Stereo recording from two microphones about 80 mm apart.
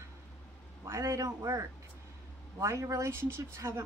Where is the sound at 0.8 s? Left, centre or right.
Right.